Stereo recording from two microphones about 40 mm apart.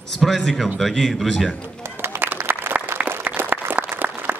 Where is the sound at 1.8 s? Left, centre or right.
Right.